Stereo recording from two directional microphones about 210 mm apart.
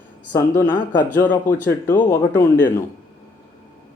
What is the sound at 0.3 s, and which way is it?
Speech, 10° left (ahead or behind).